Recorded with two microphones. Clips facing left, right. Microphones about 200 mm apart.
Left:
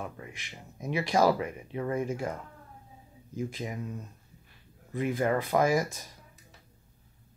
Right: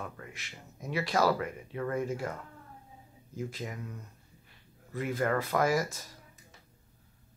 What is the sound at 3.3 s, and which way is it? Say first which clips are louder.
Speech: left 3 dB; 15° left (ahead or behind).